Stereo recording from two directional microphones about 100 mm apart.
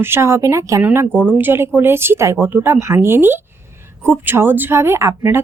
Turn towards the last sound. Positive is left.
turn(degrees=-25)  # may be behind; listen again after turning